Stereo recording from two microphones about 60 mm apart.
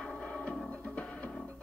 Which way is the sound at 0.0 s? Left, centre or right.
Centre.